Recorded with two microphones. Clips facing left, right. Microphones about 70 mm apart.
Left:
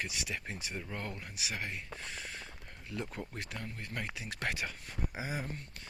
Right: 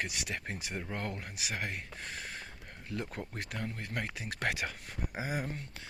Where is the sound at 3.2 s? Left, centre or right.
Right.